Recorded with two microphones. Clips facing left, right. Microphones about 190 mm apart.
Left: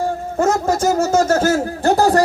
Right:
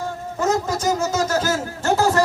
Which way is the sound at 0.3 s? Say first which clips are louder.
Left 4 dB; 50° left (ahead or behind).